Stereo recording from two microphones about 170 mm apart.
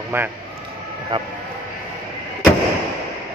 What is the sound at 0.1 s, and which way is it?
Speech, 15° right (ahead or behind).